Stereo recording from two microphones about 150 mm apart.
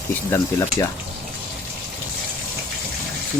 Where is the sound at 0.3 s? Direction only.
20° left (ahead or behind).